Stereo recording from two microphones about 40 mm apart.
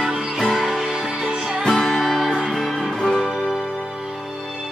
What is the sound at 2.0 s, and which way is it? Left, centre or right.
Music, centre.